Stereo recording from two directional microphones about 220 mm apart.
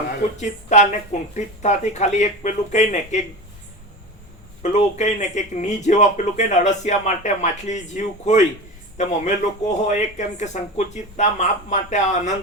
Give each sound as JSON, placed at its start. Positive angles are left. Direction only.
{"t": 0.3, "sound": "speech", "side_deg": 35}
{"t": 4.6, "sound": "speech", "side_deg": 30}